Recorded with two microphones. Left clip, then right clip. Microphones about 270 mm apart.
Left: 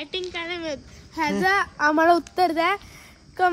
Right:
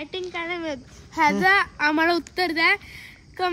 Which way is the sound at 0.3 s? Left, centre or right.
Centre.